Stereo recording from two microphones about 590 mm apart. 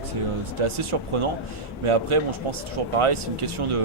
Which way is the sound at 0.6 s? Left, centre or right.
Right.